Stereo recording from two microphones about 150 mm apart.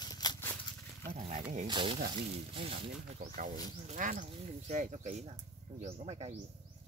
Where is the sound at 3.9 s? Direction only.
60° right (ahead or behind).